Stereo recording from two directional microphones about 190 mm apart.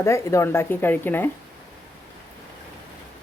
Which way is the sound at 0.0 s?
15° left (ahead or behind).